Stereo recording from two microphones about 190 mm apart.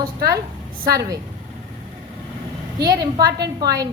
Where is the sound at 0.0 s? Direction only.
50° right (ahead or behind).